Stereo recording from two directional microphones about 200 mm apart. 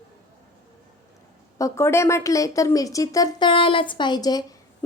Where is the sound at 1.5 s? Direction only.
15° left (ahead or behind).